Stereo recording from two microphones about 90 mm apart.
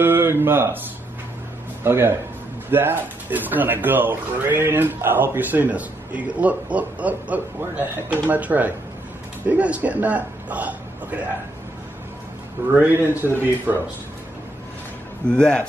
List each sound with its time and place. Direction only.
0.0 s speech: 25° right (ahead or behind)
1.8 s a man's voice: 25° right (ahead or behind)
12.7 s speech: 25° right (ahead or behind)
15.2 s speech: 10° left (ahead or behind)